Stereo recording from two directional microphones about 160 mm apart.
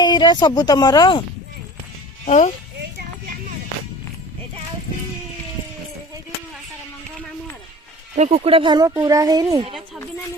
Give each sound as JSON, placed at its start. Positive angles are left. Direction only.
{"t": 0.0, "sound": "speech", "side_deg": 30}
{"t": 2.2, "sound": "speech", "side_deg": 45}
{"t": 8.1, "sound": "speech", "side_deg": -45}